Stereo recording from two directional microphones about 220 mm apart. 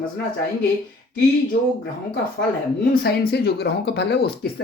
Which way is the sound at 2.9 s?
45° left (ahead or behind).